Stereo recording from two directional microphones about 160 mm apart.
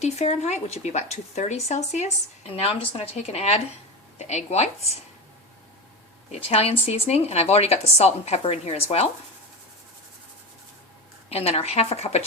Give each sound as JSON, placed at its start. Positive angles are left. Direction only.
{"t": 0.0, "sound": "a woman's voice", "side_deg": 45}
{"t": 6.3, "sound": "a woman's voice", "side_deg": 40}
{"t": 11.3, "sound": "a woman's voice", "side_deg": 40}